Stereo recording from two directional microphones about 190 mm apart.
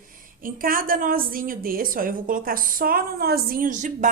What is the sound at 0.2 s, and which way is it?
A woman's voice, 45° right (ahead or behind).